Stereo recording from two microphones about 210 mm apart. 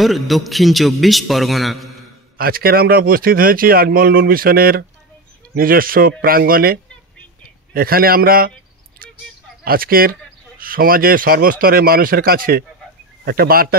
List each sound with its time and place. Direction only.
0.0 s a man's voice: centre (ahead or behind)
2.3 s speech: 45° right (ahead or behind)
9.7 s speech: 45° right (ahead or behind)